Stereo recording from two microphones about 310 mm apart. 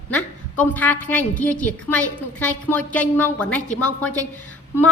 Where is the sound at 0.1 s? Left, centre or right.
Centre.